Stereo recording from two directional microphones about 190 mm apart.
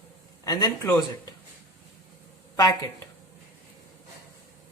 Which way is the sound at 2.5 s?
15° left (ahead or behind).